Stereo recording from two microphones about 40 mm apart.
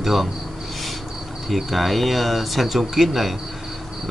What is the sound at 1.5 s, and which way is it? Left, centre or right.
Speech, centre.